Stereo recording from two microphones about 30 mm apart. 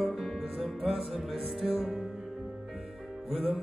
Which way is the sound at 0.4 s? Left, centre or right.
Centre.